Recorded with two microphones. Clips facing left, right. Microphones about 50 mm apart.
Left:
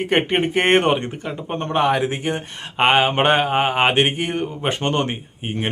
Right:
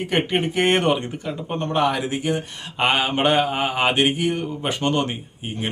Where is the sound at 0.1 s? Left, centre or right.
Left.